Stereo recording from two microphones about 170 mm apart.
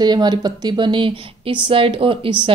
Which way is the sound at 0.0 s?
25° right (ahead or behind).